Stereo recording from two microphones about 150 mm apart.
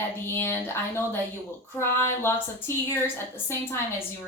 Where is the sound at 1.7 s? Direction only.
15° left (ahead or behind).